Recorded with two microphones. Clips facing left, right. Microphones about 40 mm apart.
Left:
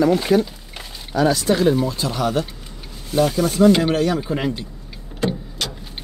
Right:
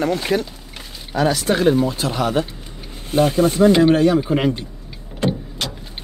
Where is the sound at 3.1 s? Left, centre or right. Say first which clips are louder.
Right 2 dB; right.